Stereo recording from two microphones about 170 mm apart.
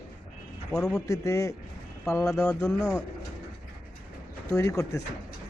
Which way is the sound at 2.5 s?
5° left (ahead or behind).